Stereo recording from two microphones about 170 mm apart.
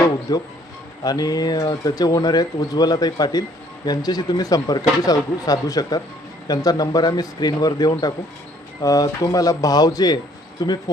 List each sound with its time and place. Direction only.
0.0 s speech: 20° left (ahead or behind)